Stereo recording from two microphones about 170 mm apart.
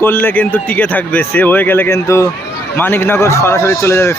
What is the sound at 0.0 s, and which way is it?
Speech, 10° left (ahead or behind).